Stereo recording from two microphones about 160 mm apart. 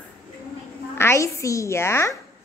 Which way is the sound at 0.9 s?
15° left (ahead or behind).